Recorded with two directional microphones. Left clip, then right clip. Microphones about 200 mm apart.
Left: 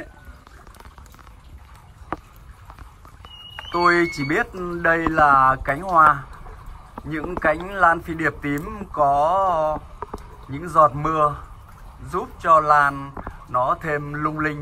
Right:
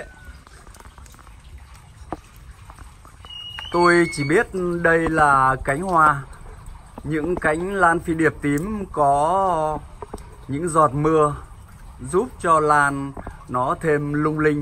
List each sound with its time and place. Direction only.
3.5 s smoke detector: 20° right (ahead or behind)
4.3 s speech: 20° right (ahead or behind)